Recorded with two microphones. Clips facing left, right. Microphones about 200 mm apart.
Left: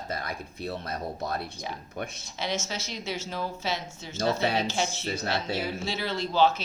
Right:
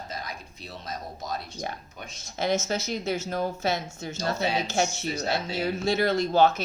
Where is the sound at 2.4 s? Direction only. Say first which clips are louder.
Right 6 dB; 50° right (ahead or behind).